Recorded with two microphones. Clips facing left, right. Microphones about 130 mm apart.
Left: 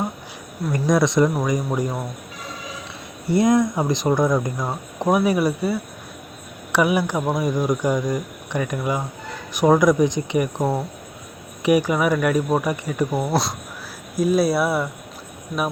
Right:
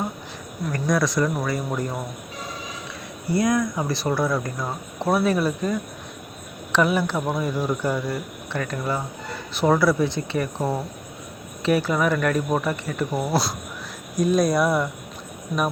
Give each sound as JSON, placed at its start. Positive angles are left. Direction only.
{"t": 0.7, "sound": "speech", "side_deg": 20}
{"t": 3.2, "sound": "speech", "side_deg": 25}
{"t": 13.2, "sound": "speech", "side_deg": 0}